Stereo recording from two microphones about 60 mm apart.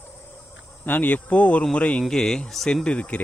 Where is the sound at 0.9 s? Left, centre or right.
Left.